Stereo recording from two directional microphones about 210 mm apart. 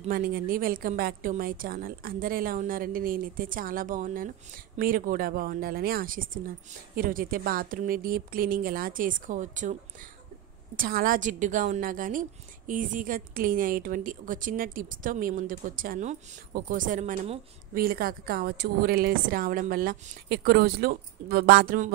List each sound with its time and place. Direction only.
0.0 s a woman's voice: 40° right (ahead or behind)
10.8 s a woman's voice: 45° right (ahead or behind)